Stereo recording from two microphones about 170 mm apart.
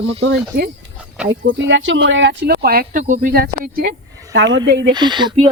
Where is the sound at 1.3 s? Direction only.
90° right; by 3.9 s 60° right (ahead or behind).